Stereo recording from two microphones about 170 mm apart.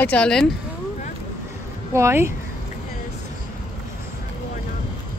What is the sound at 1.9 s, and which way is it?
Speech, 15° right (ahead or behind).